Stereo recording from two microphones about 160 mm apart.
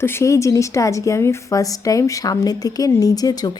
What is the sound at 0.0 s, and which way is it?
A woman's voice, 15° left (ahead or behind).